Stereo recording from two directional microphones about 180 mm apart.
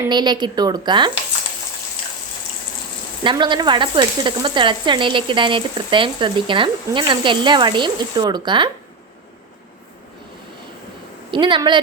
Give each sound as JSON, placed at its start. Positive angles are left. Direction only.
{"t": 0.1, "sound": "speech", "side_deg": -25}
{"t": 3.2, "sound": "speech", "side_deg": -25}
{"t": 11.3, "sound": "speech", "side_deg": -25}